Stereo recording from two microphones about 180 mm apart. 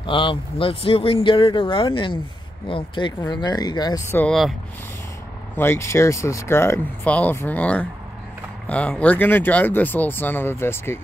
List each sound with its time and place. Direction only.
0.0 s speech: 30° left (ahead or behind)
4.1 s speech: 5° left (ahead or behind)
5.6 s speech: 15° left (ahead or behind)